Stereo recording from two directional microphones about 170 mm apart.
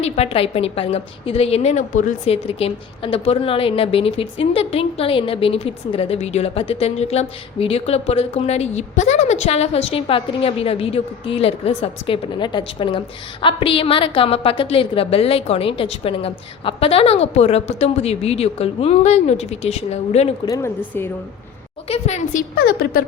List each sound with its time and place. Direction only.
0.0 s a woman's voice: 35° left (ahead or behind)
20.4 s speech: 20° left (ahead or behind)
21.8 s a woman's voice: 40° left (ahead or behind); by 23.0 s 60° left (ahead or behind)